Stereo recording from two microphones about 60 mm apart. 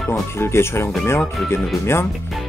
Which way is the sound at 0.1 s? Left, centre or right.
Left.